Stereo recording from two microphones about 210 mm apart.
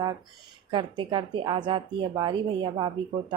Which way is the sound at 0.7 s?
25° right (ahead or behind).